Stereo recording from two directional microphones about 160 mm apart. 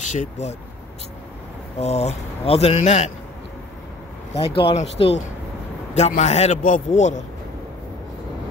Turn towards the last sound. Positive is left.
turn(degrees=50)  # may be behind; listen again after turning